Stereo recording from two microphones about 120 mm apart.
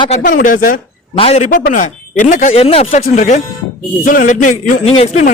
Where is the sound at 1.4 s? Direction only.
90° left.